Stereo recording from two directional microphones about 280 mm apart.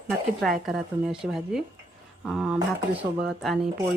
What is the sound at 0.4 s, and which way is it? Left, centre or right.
Speech, centre.